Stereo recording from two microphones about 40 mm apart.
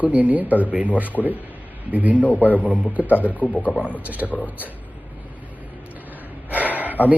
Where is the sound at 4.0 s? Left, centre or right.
Right.